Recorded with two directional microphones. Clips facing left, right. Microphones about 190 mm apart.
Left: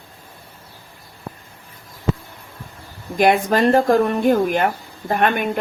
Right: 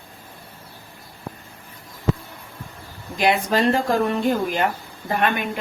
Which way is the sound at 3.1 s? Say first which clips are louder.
Left 4 dB; 50° left (ahead or behind).